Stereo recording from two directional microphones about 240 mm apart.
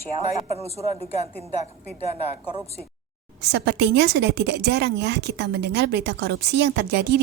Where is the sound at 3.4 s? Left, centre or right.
Right.